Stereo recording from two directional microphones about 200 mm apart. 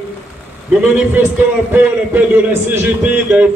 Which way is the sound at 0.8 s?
10° right (ahead or behind).